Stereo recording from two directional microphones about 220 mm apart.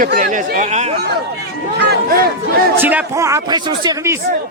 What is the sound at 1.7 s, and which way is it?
Speech, 50° right (ahead or behind).